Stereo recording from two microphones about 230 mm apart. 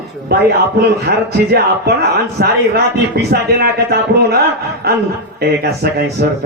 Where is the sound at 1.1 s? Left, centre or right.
Right.